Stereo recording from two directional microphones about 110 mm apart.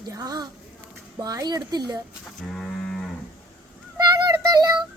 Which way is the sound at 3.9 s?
40° right (ahead or behind).